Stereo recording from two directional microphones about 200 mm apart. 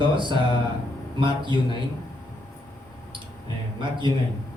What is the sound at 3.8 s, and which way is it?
Speech, 25° right (ahead or behind).